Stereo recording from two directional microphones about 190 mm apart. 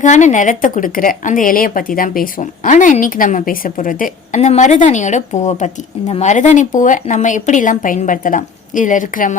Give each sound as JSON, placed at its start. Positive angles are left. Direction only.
{"t": 0.0, "sound": "a woman's voice", "side_deg": 40}